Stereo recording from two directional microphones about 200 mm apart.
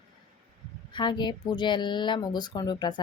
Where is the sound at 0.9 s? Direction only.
20° left (ahead or behind).